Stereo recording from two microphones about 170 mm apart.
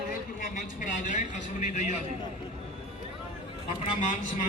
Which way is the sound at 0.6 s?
50° left (ahead or behind).